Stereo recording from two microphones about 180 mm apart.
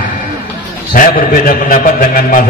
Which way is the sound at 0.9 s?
50° left (ahead or behind).